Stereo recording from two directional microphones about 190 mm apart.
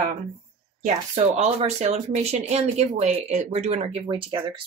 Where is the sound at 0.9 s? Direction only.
35° right (ahead or behind).